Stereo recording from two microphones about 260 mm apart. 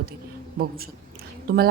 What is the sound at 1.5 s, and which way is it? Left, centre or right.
Speech, right.